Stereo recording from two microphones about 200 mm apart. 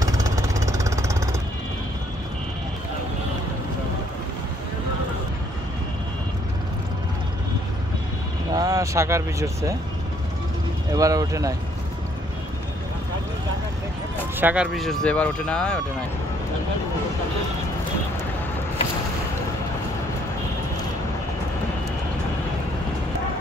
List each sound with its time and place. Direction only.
0.0 s jackhammer: 15° right (ahead or behind)
8.5 s speech: 15° right (ahead or behind)
10.9 s speech: 15° right (ahead or behind)
14.4 s speech: 5° right (ahead or behind)